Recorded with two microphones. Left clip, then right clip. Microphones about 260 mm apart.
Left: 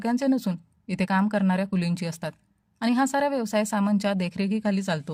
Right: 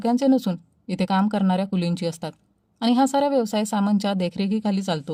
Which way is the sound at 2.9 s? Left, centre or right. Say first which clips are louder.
Right 4 dB; left.